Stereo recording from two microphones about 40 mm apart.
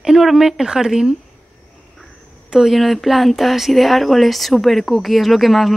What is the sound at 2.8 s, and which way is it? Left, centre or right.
Speech, centre.